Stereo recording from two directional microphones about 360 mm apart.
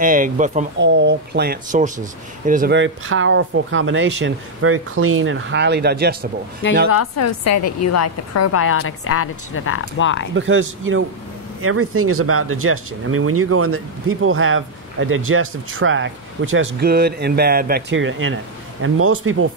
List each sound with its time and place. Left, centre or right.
0.0 s speech: right
6.9 s a woman's voice: left
10.3 s speech: right